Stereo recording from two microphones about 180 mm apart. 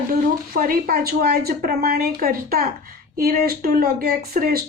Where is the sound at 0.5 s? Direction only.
55° right (ahead or behind).